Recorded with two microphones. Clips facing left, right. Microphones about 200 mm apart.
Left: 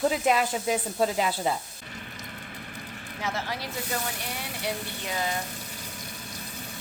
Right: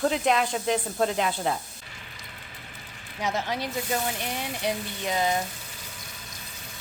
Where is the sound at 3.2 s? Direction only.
20° right (ahead or behind).